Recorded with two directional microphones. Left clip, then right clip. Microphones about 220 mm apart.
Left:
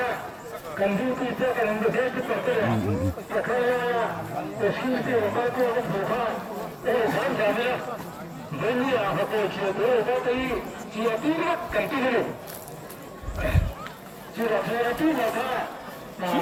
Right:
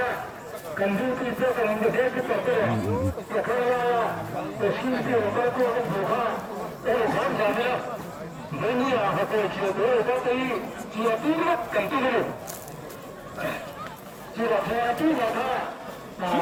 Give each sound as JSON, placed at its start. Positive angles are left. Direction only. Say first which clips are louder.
{"t": 0.8, "sound": "speech", "louder": "left 1 dB", "side_deg": 50}
{"t": 14.3, "sound": "speech", "louder": "right 1 dB", "side_deg": 50}